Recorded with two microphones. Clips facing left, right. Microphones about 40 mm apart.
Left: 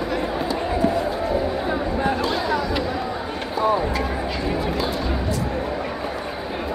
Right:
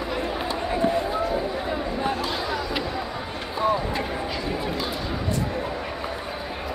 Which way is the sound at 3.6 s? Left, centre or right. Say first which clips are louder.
Left 2 dB; right.